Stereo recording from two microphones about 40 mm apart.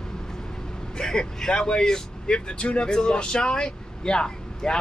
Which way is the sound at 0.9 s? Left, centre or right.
Centre.